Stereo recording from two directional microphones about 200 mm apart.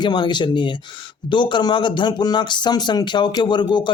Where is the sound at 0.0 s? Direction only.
20° left (ahead or behind).